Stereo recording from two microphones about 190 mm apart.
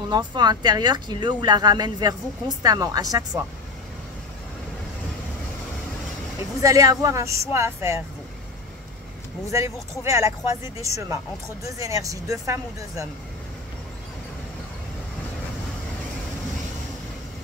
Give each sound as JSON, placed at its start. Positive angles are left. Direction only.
{"t": 0.1, "sound": "speech", "side_deg": -20}
{"t": 6.6, "sound": "speech", "side_deg": -15}
{"t": 9.5, "sound": "speech", "side_deg": -15}